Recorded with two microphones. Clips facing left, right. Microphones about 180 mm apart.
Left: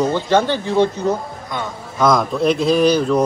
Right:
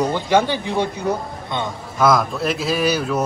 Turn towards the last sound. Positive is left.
turn(degrees=-5)  # may be behind; listen again after turning